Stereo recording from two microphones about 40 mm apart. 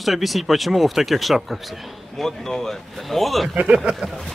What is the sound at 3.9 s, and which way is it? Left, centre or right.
Speech, right.